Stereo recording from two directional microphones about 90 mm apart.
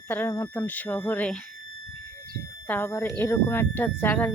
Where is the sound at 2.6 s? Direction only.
20° left (ahead or behind).